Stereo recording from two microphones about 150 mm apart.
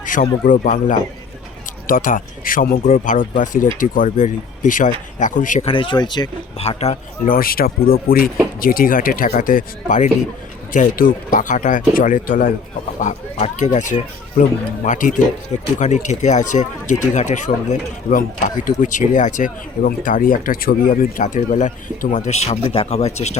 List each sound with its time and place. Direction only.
0.0 s speech: 65° left (ahead or behind)
5.6 s speech: 35° left (ahead or behind)
6.6 s a man's voice: 45° left (ahead or behind)
7.3 s speech: 75° left (ahead or behind)
13.0 s speech: 55° left (ahead or behind)